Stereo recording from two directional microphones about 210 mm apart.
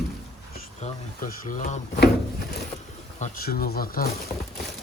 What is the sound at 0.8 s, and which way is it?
Speech, 40° left (ahead or behind).